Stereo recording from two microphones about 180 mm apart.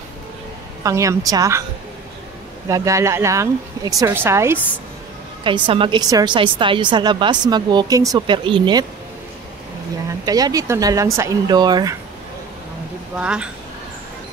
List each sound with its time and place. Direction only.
0.8 s speech: 20° right (ahead or behind)
2.7 s speech: 15° right (ahead or behind)
5.4 s a woman's voice: 30° right (ahead or behind)
10.2 s a woman's voice: 20° right (ahead or behind)
13.2 s speech: 5° right (ahead or behind)